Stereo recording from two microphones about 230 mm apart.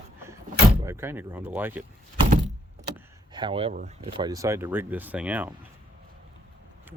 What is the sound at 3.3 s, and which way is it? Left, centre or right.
Speech, right.